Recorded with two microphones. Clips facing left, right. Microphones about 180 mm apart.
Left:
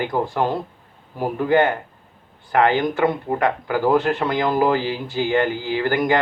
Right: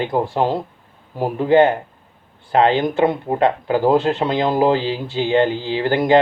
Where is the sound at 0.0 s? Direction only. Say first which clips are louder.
Right 3 dB; 20° right (ahead or behind).